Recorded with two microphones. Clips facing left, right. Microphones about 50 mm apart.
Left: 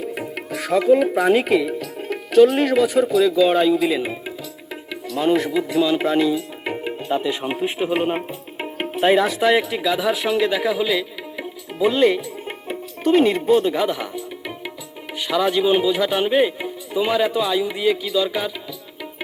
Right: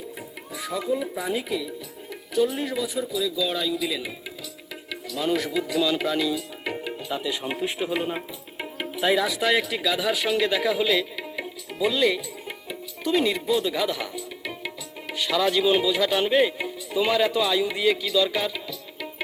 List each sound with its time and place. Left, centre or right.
0.0 s speech: left
6.7 s music: left
7.5 s a man's voice: left
7.9 s speech: left
8.5 s music: left
9.4 s a man's voice: left; by 11.4 s centre
11.8 s music: left
15.2 s speech: centre